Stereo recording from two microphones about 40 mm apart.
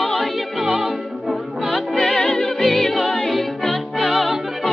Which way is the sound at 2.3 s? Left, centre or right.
Centre.